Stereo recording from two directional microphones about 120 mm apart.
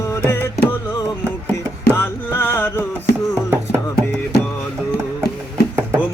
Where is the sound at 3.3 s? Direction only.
20° right (ahead or behind).